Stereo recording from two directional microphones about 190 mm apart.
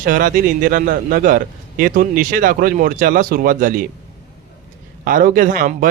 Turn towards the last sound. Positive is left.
turn(degrees=-45)  # may be behind; listen again after turning